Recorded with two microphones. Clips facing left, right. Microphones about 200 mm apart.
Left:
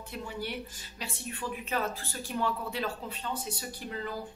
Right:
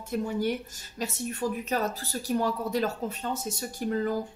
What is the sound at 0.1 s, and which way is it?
Speech, 45° right (ahead or behind).